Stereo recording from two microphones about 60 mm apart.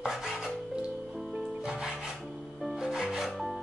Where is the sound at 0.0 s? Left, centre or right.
Centre.